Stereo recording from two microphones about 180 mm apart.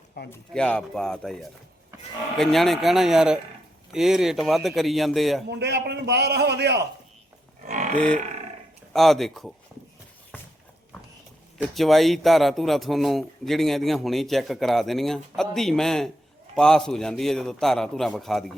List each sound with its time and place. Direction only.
0.3 s speech: 5° left (ahead or behind)
5.5 s a man's voice: 65° right (ahead or behind)
7.9 s speech: 5° left (ahead or behind)
11.5 s speech: centre (ahead or behind)